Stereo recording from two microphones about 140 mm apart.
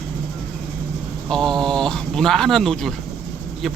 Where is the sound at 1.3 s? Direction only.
Centre (ahead or behind).